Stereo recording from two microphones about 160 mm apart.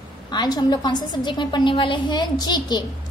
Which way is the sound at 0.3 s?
25° left (ahead or behind).